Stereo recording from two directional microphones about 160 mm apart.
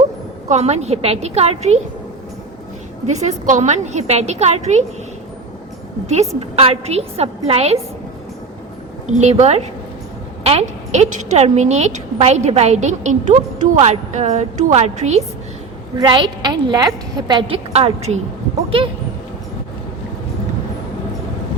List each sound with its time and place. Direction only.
0.4 s a woman's voice: 45° right (ahead or behind)
3.1 s a woman's voice: 45° right (ahead or behind)
6.1 s a woman's voice: 40° right (ahead or behind)
9.0 s a woman's voice: 45° right (ahead or behind)
16.0 s a woman's voice: 30° right (ahead or behind)